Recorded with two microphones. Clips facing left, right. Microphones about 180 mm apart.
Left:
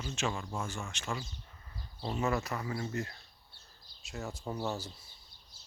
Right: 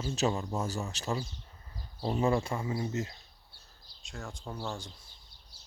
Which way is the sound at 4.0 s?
5° left (ahead or behind).